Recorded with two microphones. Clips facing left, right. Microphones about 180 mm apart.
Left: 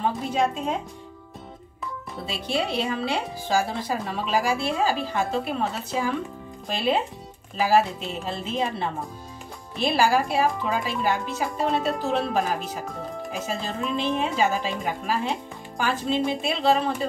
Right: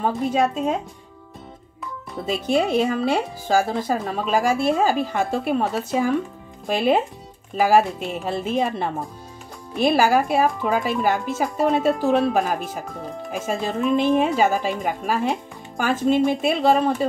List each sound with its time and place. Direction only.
2.2 s speech: 45° right (ahead or behind)